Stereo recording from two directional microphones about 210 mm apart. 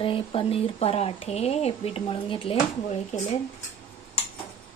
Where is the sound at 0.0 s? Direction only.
25° left (ahead or behind).